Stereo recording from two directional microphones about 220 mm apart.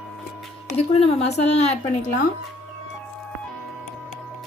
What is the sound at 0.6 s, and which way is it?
A woman's voice, 30° left (ahead or behind).